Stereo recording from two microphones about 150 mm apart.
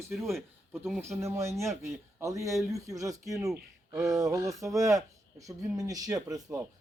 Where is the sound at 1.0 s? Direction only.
20° right (ahead or behind).